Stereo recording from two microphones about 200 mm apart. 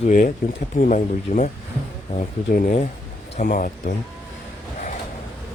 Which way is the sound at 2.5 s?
45° left (ahead or behind).